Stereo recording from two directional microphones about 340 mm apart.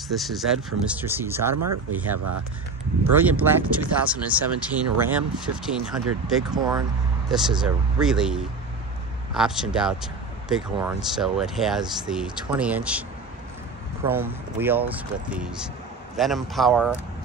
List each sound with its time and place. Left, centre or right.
0.1 s speech: centre
2.1 s speech: right
3.2 s speech: centre
14.6 s speech: centre